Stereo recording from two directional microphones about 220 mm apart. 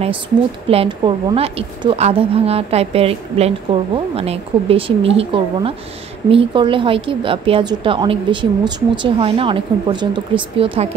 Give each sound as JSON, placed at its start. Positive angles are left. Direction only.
{"t": 0.7, "sound": "a woman's voice", "side_deg": -25}